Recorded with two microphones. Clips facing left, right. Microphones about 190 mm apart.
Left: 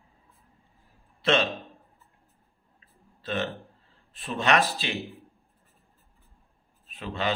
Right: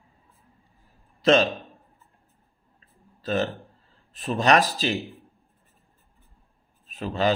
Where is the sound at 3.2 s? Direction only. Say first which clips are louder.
Right 5 dB; 40° right (ahead or behind).